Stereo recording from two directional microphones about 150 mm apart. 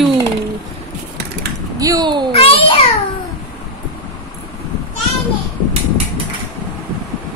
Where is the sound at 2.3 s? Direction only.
40° left (ahead or behind).